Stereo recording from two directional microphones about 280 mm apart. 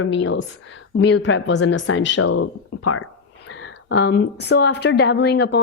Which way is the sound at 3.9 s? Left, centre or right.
Left.